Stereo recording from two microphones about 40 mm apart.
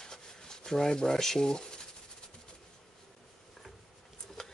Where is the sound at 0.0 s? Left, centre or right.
Centre.